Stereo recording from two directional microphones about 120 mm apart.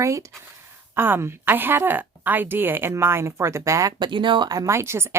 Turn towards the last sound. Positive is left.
turn(degrees=-20)  # may be behind; listen again after turning